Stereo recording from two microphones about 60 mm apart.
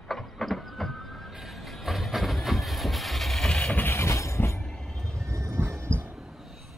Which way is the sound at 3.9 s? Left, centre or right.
Left.